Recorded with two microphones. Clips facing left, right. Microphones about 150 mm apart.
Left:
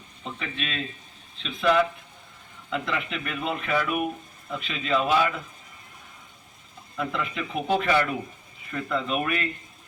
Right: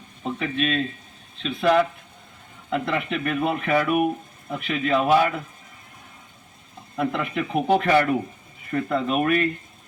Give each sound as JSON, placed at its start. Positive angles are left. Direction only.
{"t": 0.2, "sound": "speech", "side_deg": -55}
{"t": 6.9, "sound": "speech", "side_deg": -60}